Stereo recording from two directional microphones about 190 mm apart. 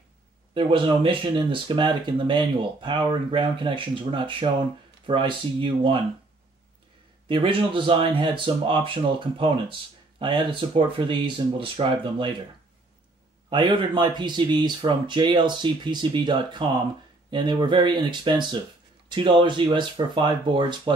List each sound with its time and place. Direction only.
0.6 s speech: 25° right (ahead or behind)
7.2 s speech: 25° right (ahead or behind)
13.5 s speech: 25° right (ahead or behind)